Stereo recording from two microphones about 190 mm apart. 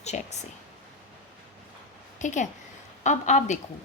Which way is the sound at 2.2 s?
40° left (ahead or behind).